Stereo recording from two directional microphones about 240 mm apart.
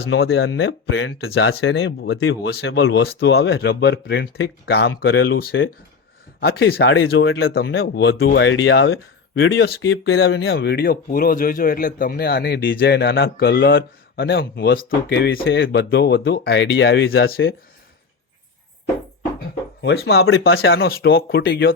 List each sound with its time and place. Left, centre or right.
0.0 s speech: left
19.4 s a sound: left
20.4 s speech: left